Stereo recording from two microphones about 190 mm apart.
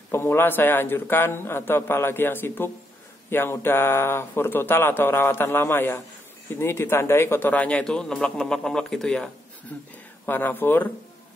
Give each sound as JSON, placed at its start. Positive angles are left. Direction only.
{"t": 0.1, "sound": "speech", "side_deg": 10}